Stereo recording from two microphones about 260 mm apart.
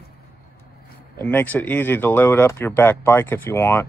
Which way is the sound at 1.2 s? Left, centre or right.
Centre.